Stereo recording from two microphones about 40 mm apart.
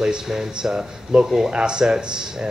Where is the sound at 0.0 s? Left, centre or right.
Centre.